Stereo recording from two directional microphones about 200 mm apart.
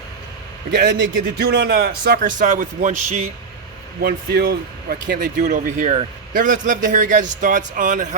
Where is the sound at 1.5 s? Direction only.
55° right (ahead or behind); by 3.3 s 35° right (ahead or behind).